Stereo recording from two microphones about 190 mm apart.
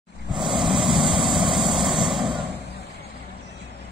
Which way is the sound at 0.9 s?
25° right (ahead or behind).